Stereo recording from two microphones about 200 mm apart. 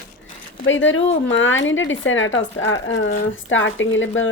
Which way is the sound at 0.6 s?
70° left (ahead or behind).